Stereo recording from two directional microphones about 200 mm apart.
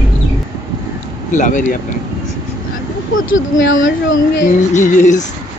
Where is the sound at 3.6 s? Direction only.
75° left (ahead or behind).